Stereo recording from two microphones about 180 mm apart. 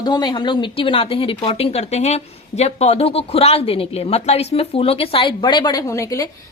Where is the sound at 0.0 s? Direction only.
25° left (ahead or behind).